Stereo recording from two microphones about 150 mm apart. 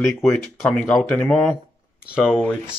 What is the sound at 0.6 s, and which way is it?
Speech, 10° left (ahead or behind).